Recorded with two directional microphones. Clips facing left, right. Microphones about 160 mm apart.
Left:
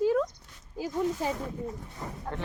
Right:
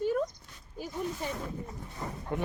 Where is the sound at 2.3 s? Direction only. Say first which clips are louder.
Right 5 dB; 10° right (ahead or behind).